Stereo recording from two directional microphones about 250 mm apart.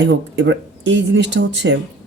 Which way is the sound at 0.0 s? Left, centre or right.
Right.